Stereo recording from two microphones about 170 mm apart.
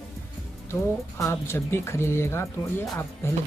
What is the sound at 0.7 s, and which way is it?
Speech, 15° left (ahead or behind).